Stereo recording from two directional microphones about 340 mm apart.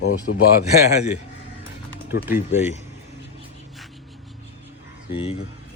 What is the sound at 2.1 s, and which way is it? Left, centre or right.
Speech, left.